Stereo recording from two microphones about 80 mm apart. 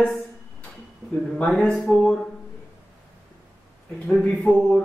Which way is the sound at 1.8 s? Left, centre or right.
Centre.